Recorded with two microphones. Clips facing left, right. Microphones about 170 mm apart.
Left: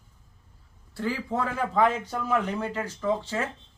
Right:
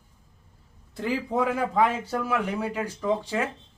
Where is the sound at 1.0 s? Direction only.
15° right (ahead or behind).